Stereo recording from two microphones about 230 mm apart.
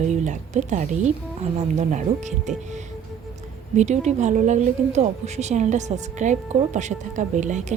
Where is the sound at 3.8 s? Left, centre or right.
Right.